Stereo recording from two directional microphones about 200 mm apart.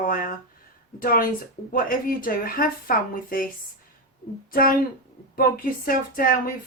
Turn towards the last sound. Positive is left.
turn(degrees=45)  # may be behind; listen again after turning